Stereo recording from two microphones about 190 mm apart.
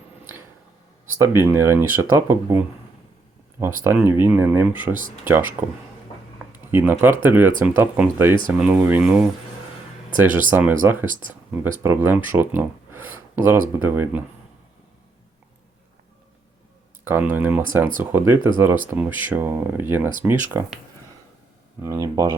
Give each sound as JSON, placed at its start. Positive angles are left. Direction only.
{"t": 1.2, "sound": "speech", "side_deg": -15}
{"t": 10.5, "sound": "speech", "side_deg": -10}
{"t": 17.0, "sound": "speech", "side_deg": -10}
{"t": 21.8, "sound": "speech", "side_deg": -20}